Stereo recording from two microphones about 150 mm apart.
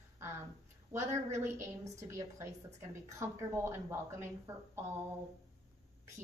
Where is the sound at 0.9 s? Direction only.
20° right (ahead or behind).